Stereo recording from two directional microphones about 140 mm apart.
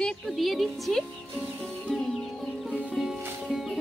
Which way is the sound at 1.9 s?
Centre (ahead or behind).